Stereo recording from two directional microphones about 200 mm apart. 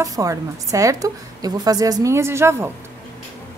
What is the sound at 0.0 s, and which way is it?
A woman's voice, 15° right (ahead or behind).